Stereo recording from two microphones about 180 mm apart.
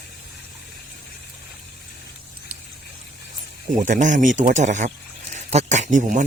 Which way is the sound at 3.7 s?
45° right (ahead or behind).